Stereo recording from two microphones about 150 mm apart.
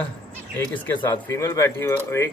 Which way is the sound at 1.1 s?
15° left (ahead or behind).